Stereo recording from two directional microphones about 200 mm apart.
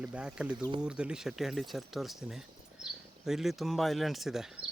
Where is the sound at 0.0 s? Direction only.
5° right (ahead or behind).